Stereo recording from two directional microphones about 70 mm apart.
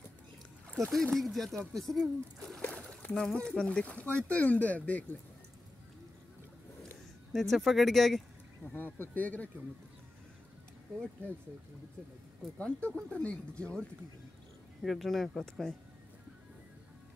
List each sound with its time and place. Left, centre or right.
0.7 s speech: centre
2.6 s a sound: left
3.3 s speech: centre
7.3 s speech: centre
8.7 s speech: left
12.5 s speech: centre
14.8 s speech: centre